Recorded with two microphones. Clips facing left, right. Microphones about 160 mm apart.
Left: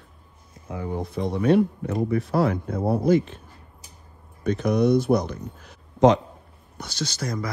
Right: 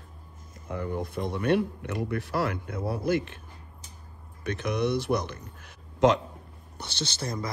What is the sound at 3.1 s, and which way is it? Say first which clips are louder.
Speech: left 7 dB; 60° right (ahead or behind).